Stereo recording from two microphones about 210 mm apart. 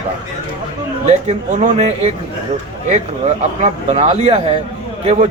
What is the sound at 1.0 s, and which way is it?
Speech, 30° right (ahead or behind).